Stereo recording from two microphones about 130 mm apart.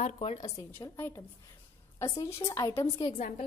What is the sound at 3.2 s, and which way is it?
Speech, 75° left (ahead or behind).